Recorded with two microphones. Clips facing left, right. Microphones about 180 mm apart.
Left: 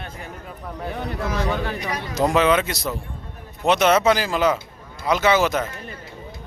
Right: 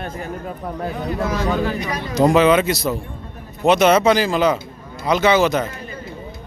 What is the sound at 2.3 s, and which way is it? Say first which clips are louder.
A man's voice: right 4 dB; centre (ahead or behind).